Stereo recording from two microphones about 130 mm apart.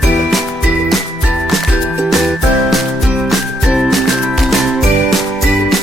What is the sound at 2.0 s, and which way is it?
Music, centre (ahead or behind).